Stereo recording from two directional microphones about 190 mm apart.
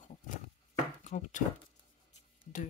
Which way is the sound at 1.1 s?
40° left (ahead or behind).